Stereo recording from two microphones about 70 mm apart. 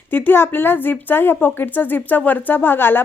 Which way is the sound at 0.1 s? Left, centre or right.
Left.